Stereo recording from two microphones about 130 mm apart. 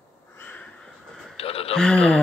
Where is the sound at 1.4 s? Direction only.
50° left (ahead or behind).